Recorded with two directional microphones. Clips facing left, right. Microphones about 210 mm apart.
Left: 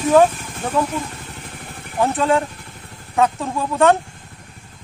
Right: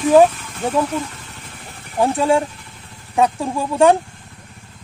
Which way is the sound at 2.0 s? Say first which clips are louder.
Right 2 dB; 15° right (ahead or behind).